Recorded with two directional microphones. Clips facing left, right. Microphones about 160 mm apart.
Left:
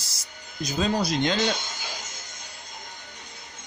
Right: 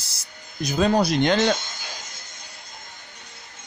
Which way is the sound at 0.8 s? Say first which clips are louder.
Right 5 dB; 60° right (ahead or behind).